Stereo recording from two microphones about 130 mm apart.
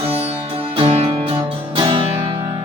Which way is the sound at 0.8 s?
45° right (ahead or behind).